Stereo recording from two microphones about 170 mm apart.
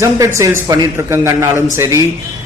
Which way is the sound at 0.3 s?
20° right (ahead or behind).